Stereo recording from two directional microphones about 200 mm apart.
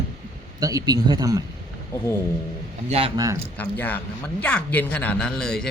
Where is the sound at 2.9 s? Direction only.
30° right (ahead or behind).